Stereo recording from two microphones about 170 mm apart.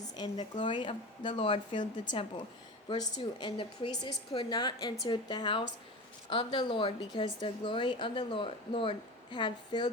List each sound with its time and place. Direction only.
0.2 s a woman's voice: 25° left (ahead or behind)